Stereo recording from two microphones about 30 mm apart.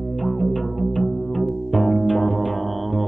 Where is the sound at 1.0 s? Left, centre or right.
Centre.